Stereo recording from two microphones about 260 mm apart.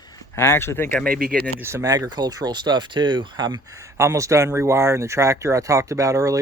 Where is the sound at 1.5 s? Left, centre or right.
Centre.